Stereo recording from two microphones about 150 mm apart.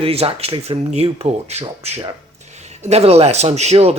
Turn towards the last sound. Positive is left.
turn(degrees=-45)  # may be behind; listen again after turning